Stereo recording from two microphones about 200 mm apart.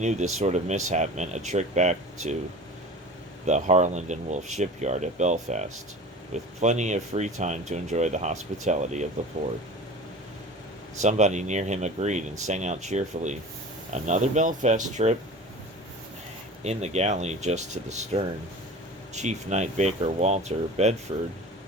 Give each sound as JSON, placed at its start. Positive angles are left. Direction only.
{"t": 0.0, "sound": "speech", "side_deg": -35}
{"t": 3.4, "sound": "speech", "side_deg": -35}
{"t": 11.0, "sound": "speech", "side_deg": -35}
{"t": 16.6, "sound": "speech", "side_deg": -35}